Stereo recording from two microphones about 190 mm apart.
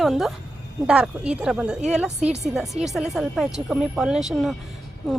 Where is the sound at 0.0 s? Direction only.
Centre (ahead or behind).